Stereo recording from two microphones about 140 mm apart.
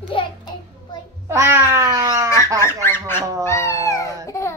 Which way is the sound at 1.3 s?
15° right (ahead or behind).